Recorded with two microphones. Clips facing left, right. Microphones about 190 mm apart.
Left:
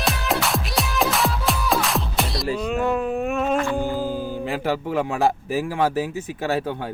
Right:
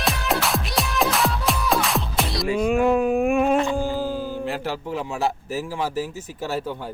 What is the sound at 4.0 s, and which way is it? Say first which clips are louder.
Mantra: even; 15° left (ahead or behind).